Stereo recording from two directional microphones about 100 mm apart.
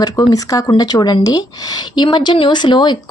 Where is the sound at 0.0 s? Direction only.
35° left (ahead or behind).